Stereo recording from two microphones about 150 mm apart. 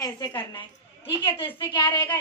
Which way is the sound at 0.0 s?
30° left (ahead or behind).